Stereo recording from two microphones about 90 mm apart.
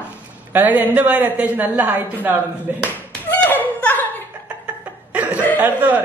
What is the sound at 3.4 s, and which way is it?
Laughter, 15° left (ahead or behind).